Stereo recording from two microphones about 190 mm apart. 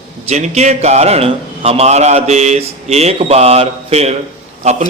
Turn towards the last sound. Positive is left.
turn(degrees=-35)  # may be behind; listen again after turning